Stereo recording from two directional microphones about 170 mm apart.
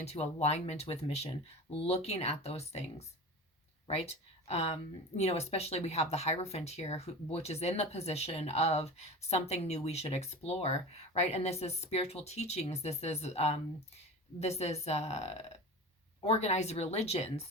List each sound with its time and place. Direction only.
0.0 s speech: 40° left (ahead or behind)